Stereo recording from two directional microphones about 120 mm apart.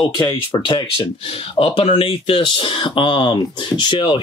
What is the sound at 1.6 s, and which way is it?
Speech, 50° left (ahead or behind).